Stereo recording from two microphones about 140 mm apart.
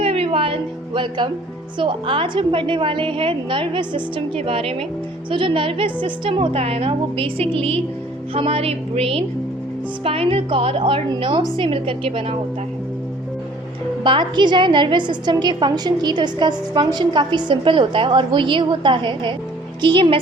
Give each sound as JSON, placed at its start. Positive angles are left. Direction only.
{"t": 0.0, "sound": "a sound", "side_deg": -40}
{"t": 1.8, "sound": "a woman's voice", "side_deg": -35}
{"t": 14.0, "sound": "a woman's voice", "side_deg": -35}